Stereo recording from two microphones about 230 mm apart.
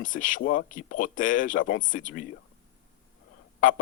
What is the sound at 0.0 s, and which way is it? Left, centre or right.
Speech, left.